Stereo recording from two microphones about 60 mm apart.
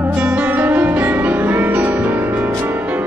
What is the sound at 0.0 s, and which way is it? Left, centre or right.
Music, right.